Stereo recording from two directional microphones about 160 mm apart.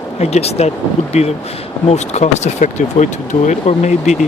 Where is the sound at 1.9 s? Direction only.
45° left (ahead or behind).